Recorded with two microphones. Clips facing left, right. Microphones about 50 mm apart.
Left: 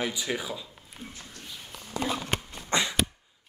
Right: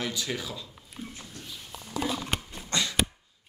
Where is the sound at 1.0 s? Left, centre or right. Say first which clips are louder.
Right 3 dB; centre.